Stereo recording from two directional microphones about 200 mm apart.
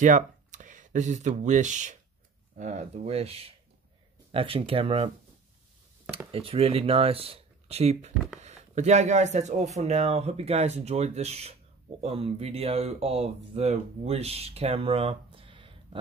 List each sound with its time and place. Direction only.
0.0 s speech: 40° right (ahead or behind)
6.1 s speech: 30° right (ahead or behind)